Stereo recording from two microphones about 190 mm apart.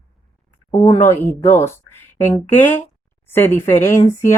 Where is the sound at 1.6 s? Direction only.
10° left (ahead or behind).